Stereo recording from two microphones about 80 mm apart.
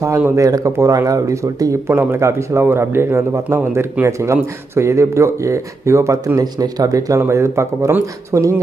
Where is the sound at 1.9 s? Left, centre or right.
Right.